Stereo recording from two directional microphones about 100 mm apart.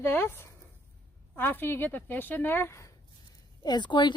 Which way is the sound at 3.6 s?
45° left (ahead or behind).